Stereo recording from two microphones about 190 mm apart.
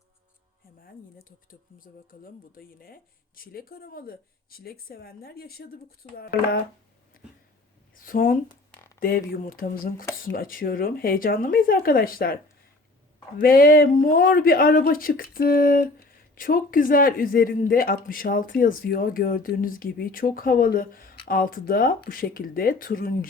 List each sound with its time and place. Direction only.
1.5 s speech: 50° left (ahead or behind)
7.9 s a sound: 45° left (ahead or behind)
9.0 s speech: 50° left (ahead or behind)
13.4 s speech: 50° left (ahead or behind)